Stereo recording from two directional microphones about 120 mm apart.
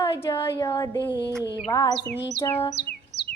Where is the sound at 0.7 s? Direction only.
25° left (ahead or behind).